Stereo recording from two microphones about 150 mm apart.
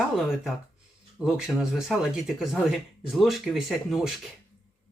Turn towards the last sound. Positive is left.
turn(degrees=0)  # may be behind; listen again after turning